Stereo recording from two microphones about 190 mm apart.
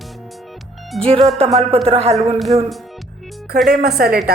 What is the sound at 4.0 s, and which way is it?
Speech, 50° right (ahead or behind).